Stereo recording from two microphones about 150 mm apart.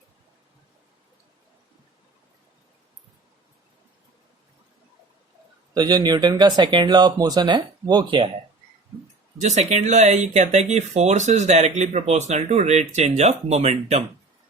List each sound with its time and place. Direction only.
5.7 s speech: 25° right (ahead or behind)
9.4 s speech: 50° right (ahead or behind)